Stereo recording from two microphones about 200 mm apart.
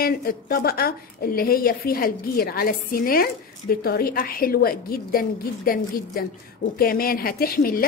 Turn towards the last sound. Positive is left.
turn(degrees=45)  # may be behind; listen again after turning